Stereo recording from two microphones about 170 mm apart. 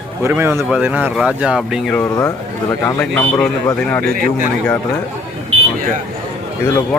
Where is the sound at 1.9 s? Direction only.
20° left (ahead or behind).